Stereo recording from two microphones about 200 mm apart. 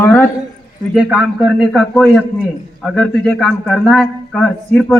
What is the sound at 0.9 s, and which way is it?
A man's voice, 5° right (ahead or behind).